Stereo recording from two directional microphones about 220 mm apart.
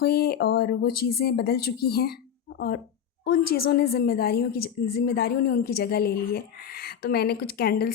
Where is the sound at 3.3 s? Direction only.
45° left (ahead or behind).